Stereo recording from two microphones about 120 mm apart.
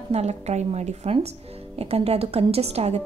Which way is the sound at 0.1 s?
65° right (ahead or behind).